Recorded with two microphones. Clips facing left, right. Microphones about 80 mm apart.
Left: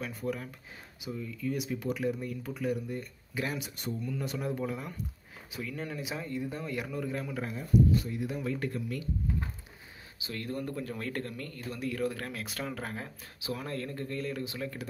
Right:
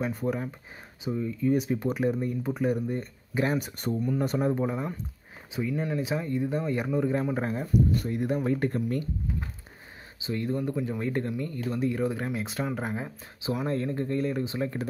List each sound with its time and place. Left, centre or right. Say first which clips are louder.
0.0 s speech: right 6 dB; right
5.5 s speech: right 8 dB; centre; by 7.6 s right
7.9 s speech: right 4 dB; right
10.2 s speech: right 7 dB; centre